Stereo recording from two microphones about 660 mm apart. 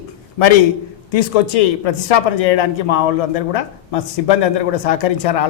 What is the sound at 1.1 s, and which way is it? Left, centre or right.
Speech, left.